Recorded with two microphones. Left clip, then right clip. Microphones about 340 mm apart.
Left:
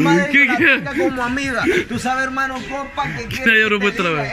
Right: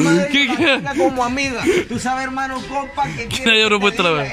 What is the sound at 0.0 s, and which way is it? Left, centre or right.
A man's voice, centre.